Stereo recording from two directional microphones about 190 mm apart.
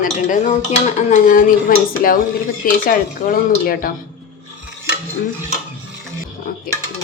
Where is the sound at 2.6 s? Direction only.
45° left (ahead or behind).